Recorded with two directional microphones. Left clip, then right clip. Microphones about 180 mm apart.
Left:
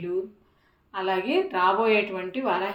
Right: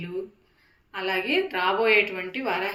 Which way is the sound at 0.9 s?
40° left (ahead or behind).